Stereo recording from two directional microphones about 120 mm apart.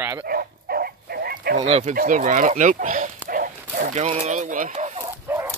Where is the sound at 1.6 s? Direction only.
60° right (ahead or behind); by 3.1 s 90° right.